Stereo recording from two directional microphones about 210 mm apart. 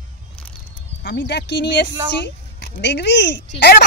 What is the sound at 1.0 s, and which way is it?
A woman's voice, 50° left (ahead or behind).